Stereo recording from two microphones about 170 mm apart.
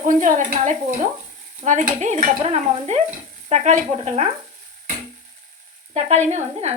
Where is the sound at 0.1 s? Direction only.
50° right (ahead or behind).